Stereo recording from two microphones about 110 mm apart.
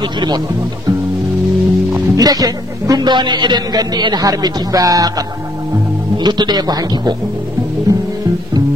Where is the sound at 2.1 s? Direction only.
35° right (ahead or behind).